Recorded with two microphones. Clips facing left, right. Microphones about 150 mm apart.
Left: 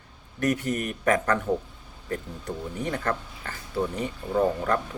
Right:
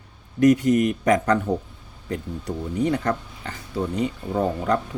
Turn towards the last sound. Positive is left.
turn(degrees=-15)  # may be behind; listen again after turning